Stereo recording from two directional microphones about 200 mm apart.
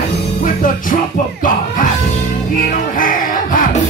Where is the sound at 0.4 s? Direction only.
45° left (ahead or behind).